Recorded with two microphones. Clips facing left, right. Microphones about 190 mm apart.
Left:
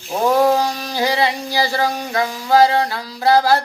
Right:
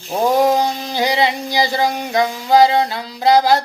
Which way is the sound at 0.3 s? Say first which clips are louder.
Even; 20° right (ahead or behind).